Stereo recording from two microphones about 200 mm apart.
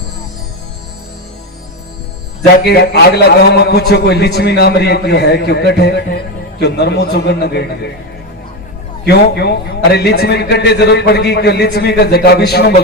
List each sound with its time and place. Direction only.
2.6 s a man's voice: 55° left (ahead or behind)
9.0 s a man's voice: 55° left (ahead or behind)